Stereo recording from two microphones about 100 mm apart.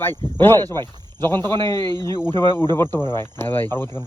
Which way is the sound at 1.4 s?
50° right (ahead or behind).